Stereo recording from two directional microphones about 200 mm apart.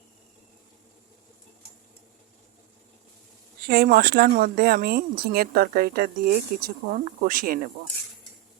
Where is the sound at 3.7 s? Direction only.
50° right (ahead or behind).